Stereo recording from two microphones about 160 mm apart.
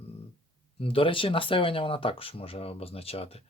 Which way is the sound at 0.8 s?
35° left (ahead or behind).